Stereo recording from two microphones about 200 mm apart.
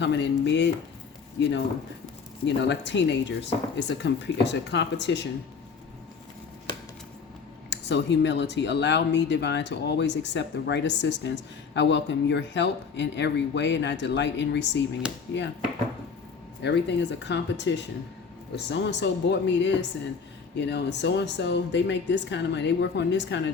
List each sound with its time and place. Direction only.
0.0 s speech: 60° left (ahead or behind)
2.6 s speech: 60° left (ahead or behind)
7.7 s speech: 60° left (ahead or behind)
16.6 s speech: 60° left (ahead or behind)